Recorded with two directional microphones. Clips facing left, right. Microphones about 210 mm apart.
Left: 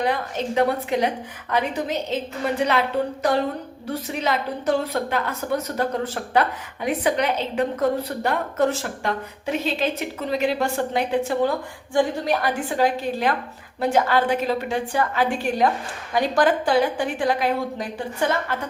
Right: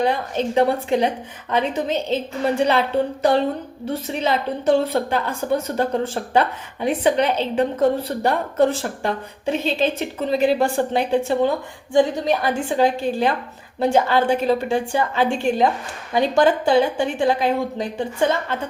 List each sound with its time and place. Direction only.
0.0 s a woman's voice: 30° right (ahead or behind)